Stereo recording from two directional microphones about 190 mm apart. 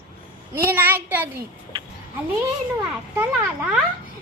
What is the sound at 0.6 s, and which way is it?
Child singing, 10° right (ahead or behind).